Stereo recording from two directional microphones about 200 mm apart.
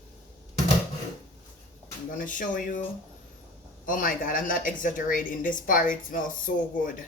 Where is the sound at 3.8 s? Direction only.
45° left (ahead or behind).